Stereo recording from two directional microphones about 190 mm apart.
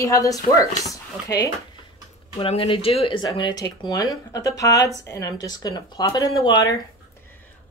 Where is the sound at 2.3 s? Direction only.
30° left (ahead or behind).